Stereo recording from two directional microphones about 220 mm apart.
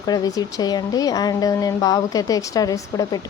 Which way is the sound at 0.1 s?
15° left (ahead or behind).